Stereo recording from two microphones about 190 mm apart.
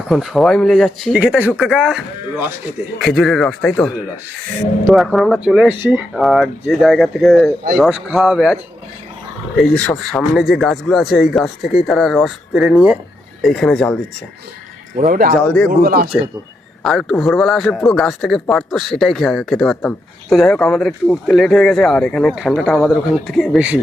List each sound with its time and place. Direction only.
0.1 s a man's voice: centre (ahead or behind)
3.0 s a man's voice: centre (ahead or behind)
9.6 s a man's voice: 5° left (ahead or behind)
14.9 s speech: 45° right (ahead or behind)
15.4 s speech: 5° left (ahead or behind)
15.8 s speech: 50° right (ahead or behind)
16.8 s a man's voice: centre (ahead or behind)